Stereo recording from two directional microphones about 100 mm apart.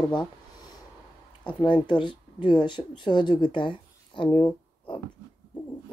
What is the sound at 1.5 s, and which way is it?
Speech, 50° left (ahead or behind).